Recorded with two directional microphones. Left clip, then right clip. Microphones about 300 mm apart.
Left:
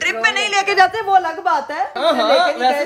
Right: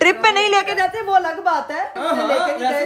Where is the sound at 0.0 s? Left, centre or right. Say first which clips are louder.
Right 3 dB; centre.